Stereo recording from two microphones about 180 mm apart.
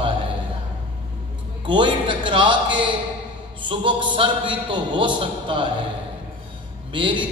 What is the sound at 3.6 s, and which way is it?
Mantra, 25° right (ahead or behind).